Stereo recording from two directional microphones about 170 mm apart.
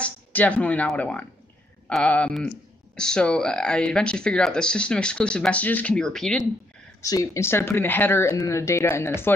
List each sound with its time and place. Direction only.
0.0 s speech: 10° left (ahead or behind)
7.0 s speech: 20° left (ahead or behind)